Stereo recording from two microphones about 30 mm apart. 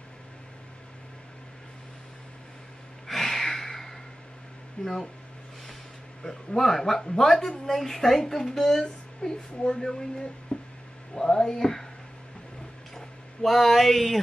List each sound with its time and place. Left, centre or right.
3.1 s a sound: centre
4.8 s speech: centre
6.2 s speech: centre
9.2 s speech: left
12.9 s speech: centre